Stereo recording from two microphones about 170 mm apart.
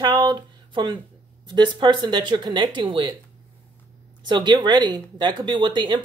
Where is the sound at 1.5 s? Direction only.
25° right (ahead or behind).